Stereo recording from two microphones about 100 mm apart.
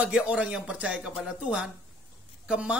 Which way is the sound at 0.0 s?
10° right (ahead or behind).